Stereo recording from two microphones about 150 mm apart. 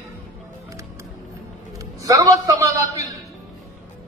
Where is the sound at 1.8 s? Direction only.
25° right (ahead or behind).